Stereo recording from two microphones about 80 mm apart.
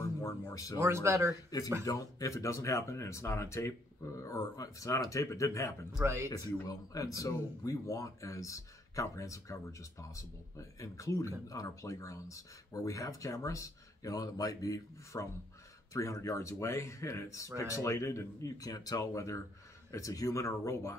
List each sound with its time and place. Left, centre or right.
0.0 s a sound: left
0.7 s speech: right
1.5 s speech: left
6.3 s speech: left